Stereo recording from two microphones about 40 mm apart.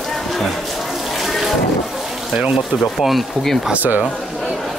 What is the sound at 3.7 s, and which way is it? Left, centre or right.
Speech, right.